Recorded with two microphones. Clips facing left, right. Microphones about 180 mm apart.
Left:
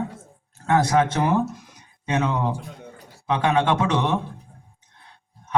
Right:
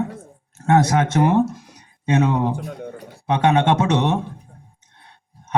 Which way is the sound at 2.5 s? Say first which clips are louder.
Right 8 dB; 65° right (ahead or behind).